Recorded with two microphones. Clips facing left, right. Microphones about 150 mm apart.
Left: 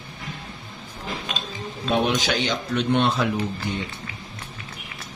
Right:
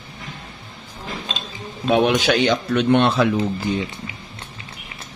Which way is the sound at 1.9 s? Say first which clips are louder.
Right 6 dB; 65° right (ahead or behind).